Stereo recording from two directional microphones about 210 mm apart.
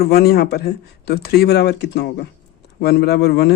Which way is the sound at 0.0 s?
50° left (ahead or behind).